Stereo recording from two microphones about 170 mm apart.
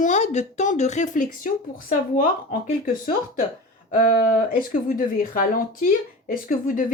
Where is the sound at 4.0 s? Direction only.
60° left (ahead or behind).